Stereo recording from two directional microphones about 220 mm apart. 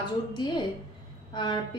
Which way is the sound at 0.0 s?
20° left (ahead or behind).